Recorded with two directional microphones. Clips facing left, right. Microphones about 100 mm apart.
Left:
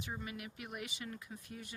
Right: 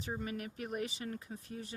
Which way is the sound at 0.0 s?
40° right (ahead or behind).